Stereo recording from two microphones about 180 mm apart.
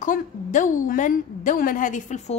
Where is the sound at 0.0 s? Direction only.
45° left (ahead or behind).